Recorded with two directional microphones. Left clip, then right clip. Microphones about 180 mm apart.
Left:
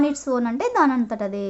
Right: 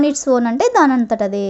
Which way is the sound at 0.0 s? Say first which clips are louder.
Right 7 dB; 30° right (ahead or behind).